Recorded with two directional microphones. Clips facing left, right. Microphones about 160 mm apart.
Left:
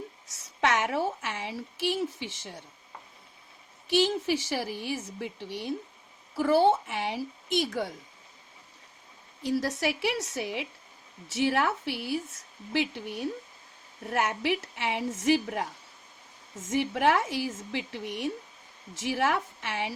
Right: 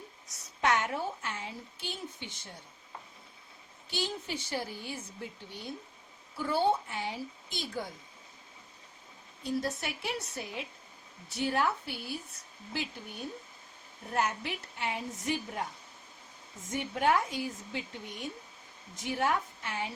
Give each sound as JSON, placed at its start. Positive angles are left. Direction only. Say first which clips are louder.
{"t": 0.3, "sound": "a woman's voice", "louder": "left 2 dB", "side_deg": 90}
{"t": 3.8, "sound": "a woman's voice", "louder": "left 11 dB", "side_deg": 80}
{"t": 9.4, "sound": "a woman's voice", "louder": "left 5 dB", "side_deg": 85}
{"t": 16.6, "sound": "a woman's voice", "louder": "left 4 dB", "side_deg": 75}